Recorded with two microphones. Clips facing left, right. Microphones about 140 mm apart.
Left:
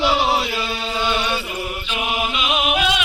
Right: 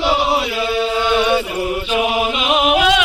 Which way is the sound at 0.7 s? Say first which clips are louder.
Right 8 dB; 60° right (ahead or behind).